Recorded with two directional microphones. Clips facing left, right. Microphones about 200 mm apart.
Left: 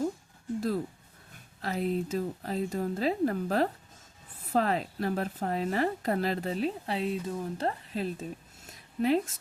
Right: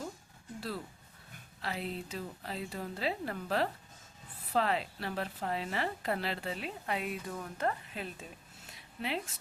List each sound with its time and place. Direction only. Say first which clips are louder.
1.6 s a woman's voice: left 8 dB; 45° left (ahead or behind)